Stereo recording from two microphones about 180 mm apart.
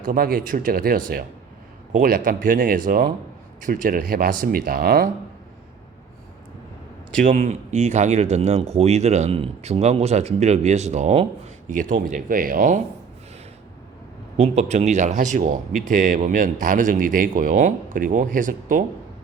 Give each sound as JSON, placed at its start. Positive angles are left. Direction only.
{"t": 0.0, "sound": "speech", "side_deg": -55}
{"t": 7.2, "sound": "speech", "side_deg": -45}
{"t": 14.3, "sound": "speech", "side_deg": -40}